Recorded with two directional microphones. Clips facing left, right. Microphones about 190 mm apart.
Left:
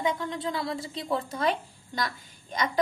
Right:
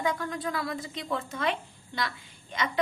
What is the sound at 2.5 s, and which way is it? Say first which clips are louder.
Speech: left 2 dB; 40° left (ahead or behind).